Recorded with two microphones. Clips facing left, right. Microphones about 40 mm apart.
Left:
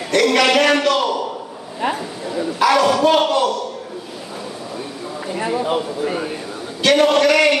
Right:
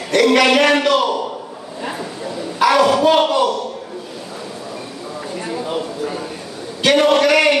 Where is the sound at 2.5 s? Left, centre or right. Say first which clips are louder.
Right 2 dB; centre.